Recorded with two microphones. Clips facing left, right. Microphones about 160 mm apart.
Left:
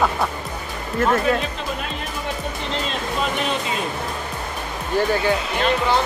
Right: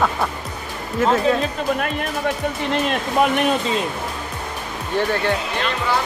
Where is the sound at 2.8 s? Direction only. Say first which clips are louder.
Right 7 dB; 60° right (ahead or behind).